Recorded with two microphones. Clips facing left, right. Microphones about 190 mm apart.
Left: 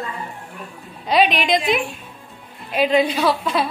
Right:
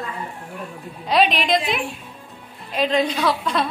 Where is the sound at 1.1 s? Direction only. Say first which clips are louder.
Left 1 dB; centre (ahead or behind).